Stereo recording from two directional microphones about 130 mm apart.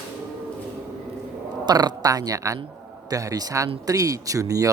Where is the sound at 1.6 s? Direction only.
30° right (ahead or behind).